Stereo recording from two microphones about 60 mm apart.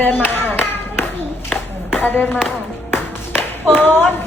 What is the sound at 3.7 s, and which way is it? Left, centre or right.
Speech, left.